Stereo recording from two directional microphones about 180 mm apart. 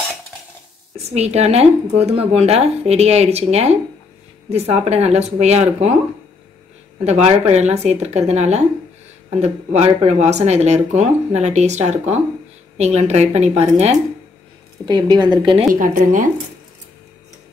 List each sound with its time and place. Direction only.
1.1 s speech: 35° right (ahead or behind)
7.1 s speech: 35° right (ahead or behind)
14.9 s a woman's voice: 25° right (ahead or behind)
15.7 s a woman's voice: 50° right (ahead or behind)